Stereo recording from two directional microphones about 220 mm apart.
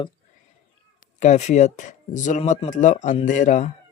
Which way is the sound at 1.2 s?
30° left (ahead or behind).